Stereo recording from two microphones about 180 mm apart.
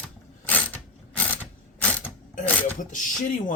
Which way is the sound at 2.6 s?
45° left (ahead or behind).